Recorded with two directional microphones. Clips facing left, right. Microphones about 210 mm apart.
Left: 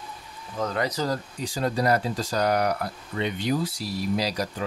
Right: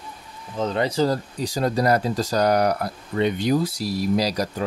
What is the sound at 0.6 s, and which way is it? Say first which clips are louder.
Speech: right 5 dB; 25° right (ahead or behind).